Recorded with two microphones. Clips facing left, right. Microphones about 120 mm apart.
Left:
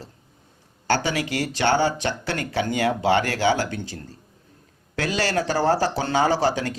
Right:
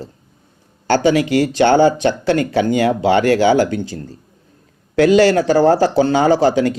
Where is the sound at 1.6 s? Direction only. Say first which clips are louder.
Right 8 dB; 50° right (ahead or behind).